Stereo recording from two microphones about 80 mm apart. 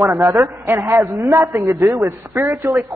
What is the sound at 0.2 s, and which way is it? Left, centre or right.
A man's voice, right.